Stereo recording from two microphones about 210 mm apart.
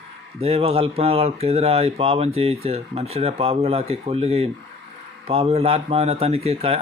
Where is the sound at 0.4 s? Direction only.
30° right (ahead or behind).